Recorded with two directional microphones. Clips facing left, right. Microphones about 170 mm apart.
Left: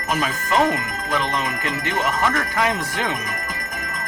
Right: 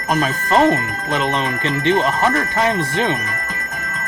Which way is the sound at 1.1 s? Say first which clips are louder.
Right 4 dB; 25° right (ahead or behind).